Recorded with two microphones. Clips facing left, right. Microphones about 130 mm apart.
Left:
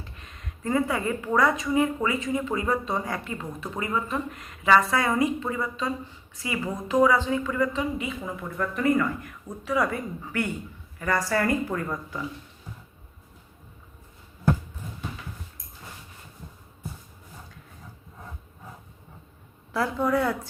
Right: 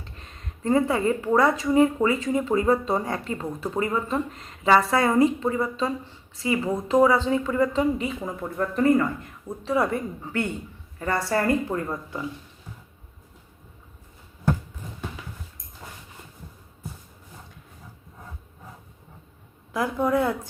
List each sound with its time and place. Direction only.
0.2 s a woman's voice: 35° right (ahead or behind)
19.7 s a woman's voice: 20° right (ahead or behind)